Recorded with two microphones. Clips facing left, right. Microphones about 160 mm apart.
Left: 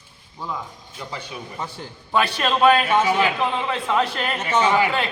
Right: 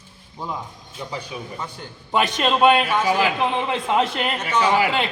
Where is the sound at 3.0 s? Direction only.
Centre (ahead or behind).